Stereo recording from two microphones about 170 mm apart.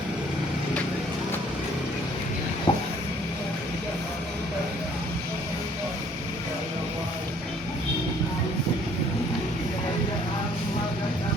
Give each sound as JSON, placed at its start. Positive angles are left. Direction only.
{"t": 2.7, "sound": "train", "side_deg": 30}